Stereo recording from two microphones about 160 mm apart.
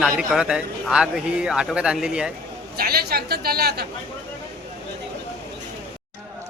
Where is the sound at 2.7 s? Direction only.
75° right (ahead or behind).